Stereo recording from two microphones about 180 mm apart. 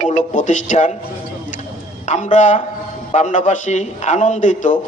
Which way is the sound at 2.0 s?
40° left (ahead or behind).